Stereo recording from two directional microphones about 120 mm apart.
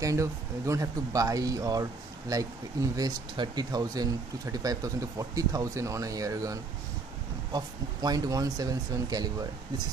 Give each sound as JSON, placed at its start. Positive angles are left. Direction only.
{"t": 0.0, "sound": "speech", "side_deg": -25}